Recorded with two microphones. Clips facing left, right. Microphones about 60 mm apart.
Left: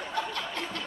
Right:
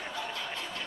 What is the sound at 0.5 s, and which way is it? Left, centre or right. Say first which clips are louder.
Music: left 3 dB; left.